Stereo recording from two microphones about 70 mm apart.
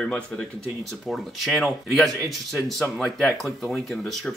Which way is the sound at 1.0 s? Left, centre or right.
Centre.